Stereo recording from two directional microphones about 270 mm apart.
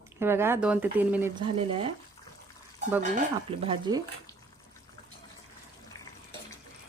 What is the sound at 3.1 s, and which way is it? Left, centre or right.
Speech, right.